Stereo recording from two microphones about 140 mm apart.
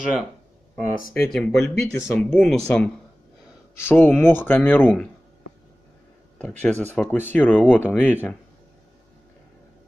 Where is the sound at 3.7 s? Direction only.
15° left (ahead or behind).